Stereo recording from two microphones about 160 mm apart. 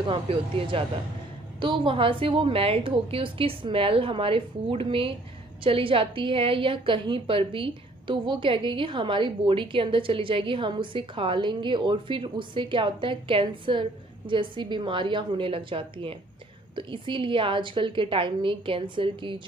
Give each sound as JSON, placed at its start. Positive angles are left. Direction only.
{"t": 0.0, "sound": "a woman's voice", "side_deg": -35}